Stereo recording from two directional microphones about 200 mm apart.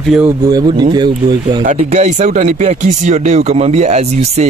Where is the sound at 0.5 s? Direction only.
20° right (ahead or behind).